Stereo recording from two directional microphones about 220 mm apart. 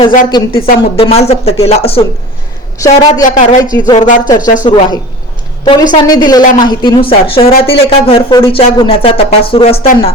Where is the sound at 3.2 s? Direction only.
35° left (ahead or behind).